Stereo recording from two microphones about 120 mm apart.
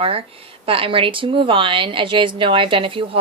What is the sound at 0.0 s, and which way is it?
A woman's voice, 50° right (ahead or behind).